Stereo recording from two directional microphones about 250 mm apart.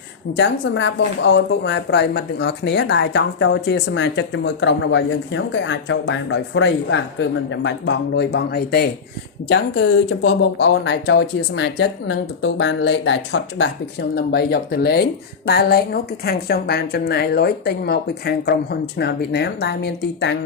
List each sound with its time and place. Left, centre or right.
0.3 s a woman's voice: left